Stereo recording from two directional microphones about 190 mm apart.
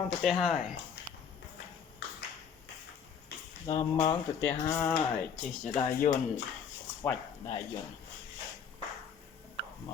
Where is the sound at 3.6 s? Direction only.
25° left (ahead or behind).